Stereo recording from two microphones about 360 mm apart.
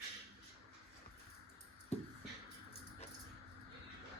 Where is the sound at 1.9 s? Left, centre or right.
Centre.